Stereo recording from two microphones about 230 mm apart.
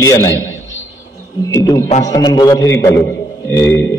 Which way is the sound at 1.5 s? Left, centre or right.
Centre.